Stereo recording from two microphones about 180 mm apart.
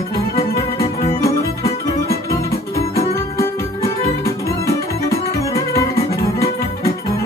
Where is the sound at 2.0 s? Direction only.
15° left (ahead or behind).